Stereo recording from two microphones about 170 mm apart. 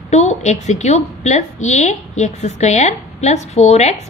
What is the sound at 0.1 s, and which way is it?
A woman's voice, 40° left (ahead or behind).